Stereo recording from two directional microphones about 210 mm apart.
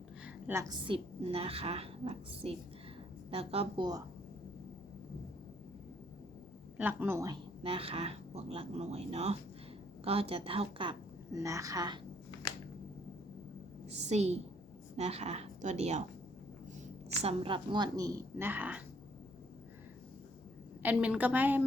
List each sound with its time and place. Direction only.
0.3 s a woman's voice: 10° right (ahead or behind)
6.7 s a woman's voice: 10° right (ahead or behind)
7.6 s a woman's voice: 25° right (ahead or behind)
11.3 s a woman's voice: 15° right (ahead or behind)
14.1 s speech: 30° right (ahead or behind)
17.2 s a woman's voice: 25° right (ahead or behind); by 18.8 s 10° right (ahead or behind)
20.8 s a woman's voice: 5° right (ahead or behind)